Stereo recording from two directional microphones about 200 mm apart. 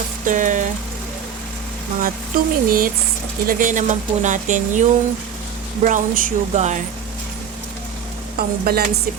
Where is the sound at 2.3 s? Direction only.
45° right (ahead or behind).